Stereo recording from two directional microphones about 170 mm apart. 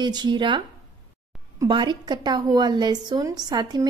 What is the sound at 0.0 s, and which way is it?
Speech, 25° right (ahead or behind).